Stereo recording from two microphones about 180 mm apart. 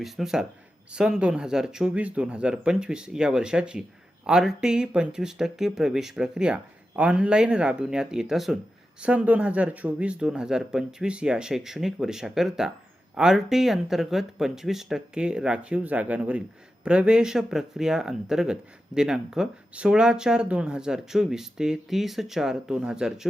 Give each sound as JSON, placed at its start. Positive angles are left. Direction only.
{"t": 0.0, "sound": "speech", "side_deg": 0}